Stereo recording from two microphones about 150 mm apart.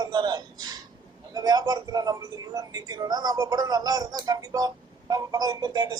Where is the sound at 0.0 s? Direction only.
30° right (ahead or behind).